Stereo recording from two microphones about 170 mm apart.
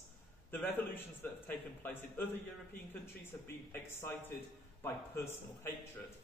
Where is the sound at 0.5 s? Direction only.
10° left (ahead or behind).